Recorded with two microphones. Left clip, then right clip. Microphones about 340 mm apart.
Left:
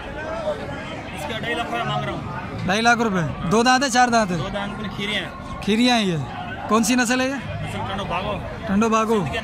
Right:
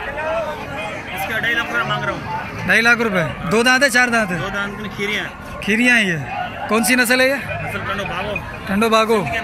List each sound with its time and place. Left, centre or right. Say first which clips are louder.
2.7 s a man's voice: right 4 dB; centre
5.7 s a man's voice: right 5 dB; centre
8.7 s a man's voice: right 5 dB; centre